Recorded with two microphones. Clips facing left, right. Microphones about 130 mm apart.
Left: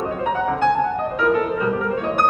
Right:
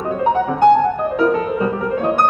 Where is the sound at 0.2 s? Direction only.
30° right (ahead or behind).